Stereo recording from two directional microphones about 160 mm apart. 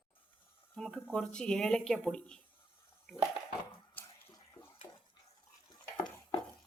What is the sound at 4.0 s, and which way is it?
Water, 10° left (ahead or behind).